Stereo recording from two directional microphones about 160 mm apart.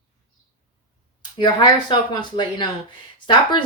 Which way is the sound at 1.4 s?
30° left (ahead or behind).